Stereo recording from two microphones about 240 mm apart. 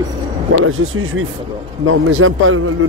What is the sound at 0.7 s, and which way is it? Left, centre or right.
Speech, right.